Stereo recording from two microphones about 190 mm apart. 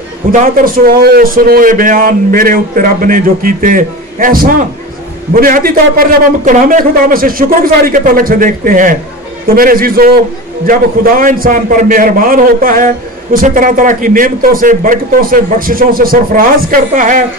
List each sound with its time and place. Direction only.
0.3 s a man's voice: 45° right (ahead or behind)